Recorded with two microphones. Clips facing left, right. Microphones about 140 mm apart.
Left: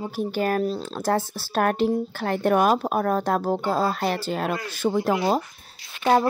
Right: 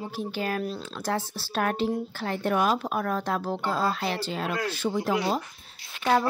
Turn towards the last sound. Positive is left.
turn(degrees=30)  # may be behind; listen again after turning